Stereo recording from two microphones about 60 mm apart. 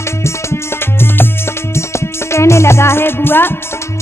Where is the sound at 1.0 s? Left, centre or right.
Left.